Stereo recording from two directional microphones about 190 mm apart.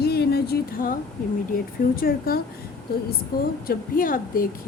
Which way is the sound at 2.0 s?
50° left (ahead or behind).